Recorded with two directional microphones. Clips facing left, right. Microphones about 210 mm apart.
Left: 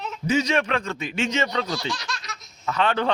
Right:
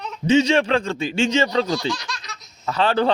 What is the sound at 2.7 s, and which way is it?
Speech, 35° right (ahead or behind).